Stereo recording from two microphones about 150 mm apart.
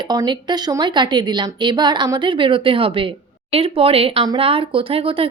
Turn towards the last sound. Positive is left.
turn(degrees=-40)  # may be behind; listen again after turning